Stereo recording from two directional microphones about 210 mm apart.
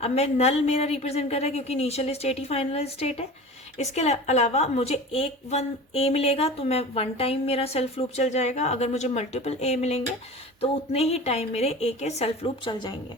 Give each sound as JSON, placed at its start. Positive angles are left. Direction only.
{"t": 0.0, "sound": "a woman's voice", "side_deg": 30}